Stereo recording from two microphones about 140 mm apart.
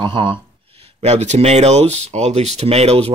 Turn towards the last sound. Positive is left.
turn(degrees=-50)  # may be behind; listen again after turning